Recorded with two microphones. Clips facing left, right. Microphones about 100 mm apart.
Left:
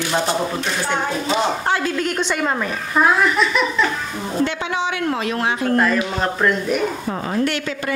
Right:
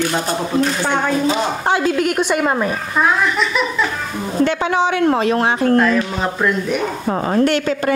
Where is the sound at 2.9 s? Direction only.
Centre (ahead or behind).